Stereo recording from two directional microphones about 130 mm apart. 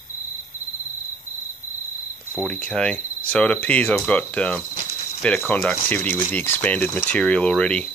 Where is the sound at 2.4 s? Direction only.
10° left (ahead or behind).